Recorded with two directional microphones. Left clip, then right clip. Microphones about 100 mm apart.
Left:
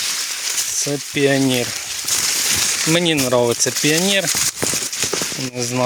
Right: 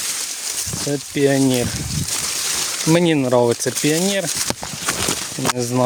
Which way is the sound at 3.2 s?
35° right (ahead or behind).